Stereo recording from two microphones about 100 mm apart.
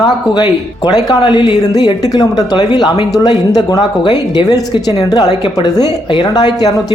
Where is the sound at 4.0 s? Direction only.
55° left (ahead or behind).